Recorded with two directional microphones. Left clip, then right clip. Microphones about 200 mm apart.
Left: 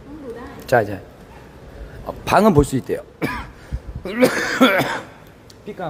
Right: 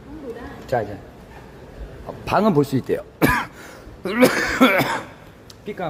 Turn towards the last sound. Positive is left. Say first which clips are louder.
# right 1 dB
turn(degrees=-5)  # may be behind; listen again after turning